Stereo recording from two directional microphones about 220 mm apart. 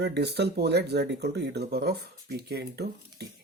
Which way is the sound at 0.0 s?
50° right (ahead or behind).